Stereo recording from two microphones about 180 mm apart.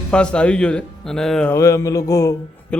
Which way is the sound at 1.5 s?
15° left (ahead or behind).